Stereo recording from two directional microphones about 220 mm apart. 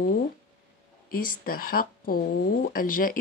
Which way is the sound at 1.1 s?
40° left (ahead or behind).